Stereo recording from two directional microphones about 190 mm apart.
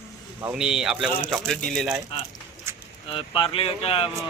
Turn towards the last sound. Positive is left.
turn(degrees=30)  # may be behind; listen again after turning